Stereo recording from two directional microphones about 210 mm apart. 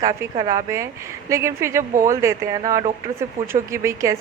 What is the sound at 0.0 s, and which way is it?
Speech, 20° right (ahead or behind).